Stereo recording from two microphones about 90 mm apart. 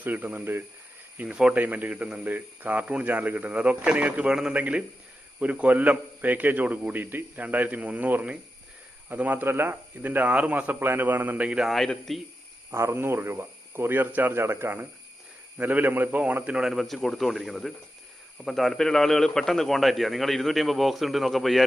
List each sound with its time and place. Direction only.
0.0 s a man's voice: 20° right (ahead or behind)
11.7 s a man's voice: centre (ahead or behind)
12.7 s a man's voice: 30° right (ahead or behind); by 21.6 s centre (ahead or behind)